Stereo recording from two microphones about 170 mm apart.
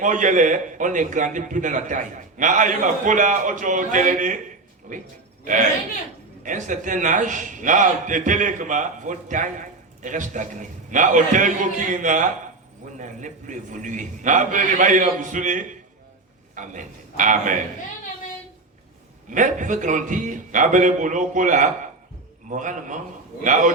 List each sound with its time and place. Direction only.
0.0 s a man's voice: 50° right (ahead or behind)
6.4 s a man's voice: 50° right (ahead or behind)
19.3 s a man's voice: 50° right (ahead or behind)